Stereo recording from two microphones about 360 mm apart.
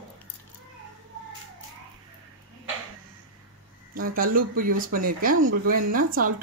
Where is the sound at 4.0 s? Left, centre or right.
Right.